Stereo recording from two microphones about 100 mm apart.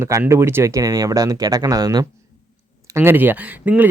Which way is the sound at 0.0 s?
25° right (ahead or behind).